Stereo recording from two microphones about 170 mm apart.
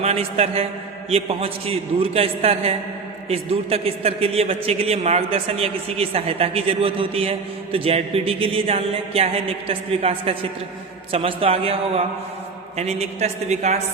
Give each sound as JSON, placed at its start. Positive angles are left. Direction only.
{"t": 0.0, "sound": "a man's voice", "side_deg": -35}